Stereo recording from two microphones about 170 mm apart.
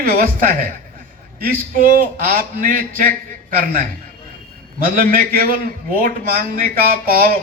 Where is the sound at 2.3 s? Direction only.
55° right (ahead or behind).